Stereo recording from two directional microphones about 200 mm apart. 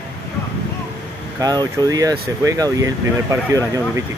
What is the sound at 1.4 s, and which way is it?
Speech, 20° right (ahead or behind).